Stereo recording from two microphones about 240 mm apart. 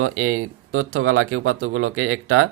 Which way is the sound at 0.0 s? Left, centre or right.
Right.